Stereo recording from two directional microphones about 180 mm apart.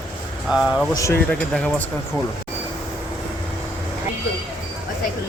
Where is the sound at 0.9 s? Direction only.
15° left (ahead or behind).